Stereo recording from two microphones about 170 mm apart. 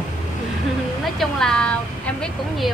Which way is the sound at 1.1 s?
5° left (ahead or behind).